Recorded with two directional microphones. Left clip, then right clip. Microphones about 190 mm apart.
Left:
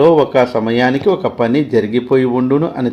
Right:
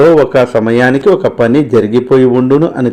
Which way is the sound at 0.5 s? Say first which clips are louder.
Right 5 dB; 10° right (ahead or behind).